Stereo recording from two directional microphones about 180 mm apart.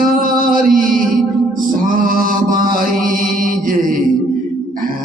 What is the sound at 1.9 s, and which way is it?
Music, 50° right (ahead or behind).